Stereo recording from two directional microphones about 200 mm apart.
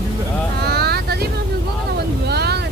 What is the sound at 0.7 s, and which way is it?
Vehicle, 55° right (ahead or behind).